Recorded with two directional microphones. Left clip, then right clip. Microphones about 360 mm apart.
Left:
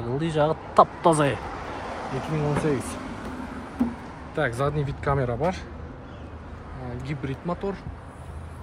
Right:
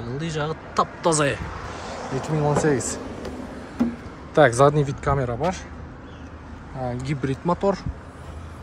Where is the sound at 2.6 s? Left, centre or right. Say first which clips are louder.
Right 4 dB; right.